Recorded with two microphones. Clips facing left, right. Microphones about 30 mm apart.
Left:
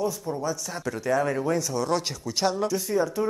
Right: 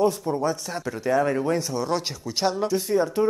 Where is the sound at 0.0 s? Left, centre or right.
Right.